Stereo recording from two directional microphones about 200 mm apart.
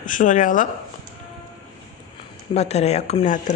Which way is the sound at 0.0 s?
40° left (ahead or behind).